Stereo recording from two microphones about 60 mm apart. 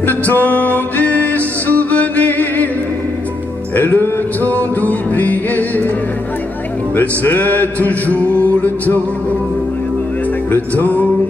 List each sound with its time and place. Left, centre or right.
0.0 s music: left
3.7 s music: left
7.0 s music: left
10.5 s music: left